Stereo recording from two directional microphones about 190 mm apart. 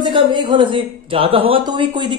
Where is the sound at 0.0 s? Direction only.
25° right (ahead or behind).